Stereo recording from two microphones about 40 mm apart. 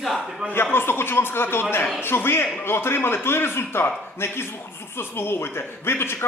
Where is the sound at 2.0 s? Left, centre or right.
Left.